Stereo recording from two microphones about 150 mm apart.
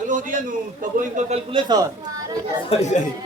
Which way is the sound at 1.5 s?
30° right (ahead or behind).